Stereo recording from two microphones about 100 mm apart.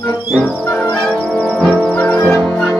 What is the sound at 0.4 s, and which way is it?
Music, 15° left (ahead or behind).